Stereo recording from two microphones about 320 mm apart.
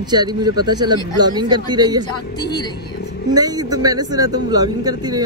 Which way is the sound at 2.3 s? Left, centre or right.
Centre.